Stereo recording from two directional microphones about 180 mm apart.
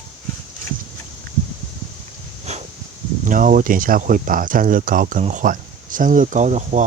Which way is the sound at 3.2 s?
45° right (ahead or behind).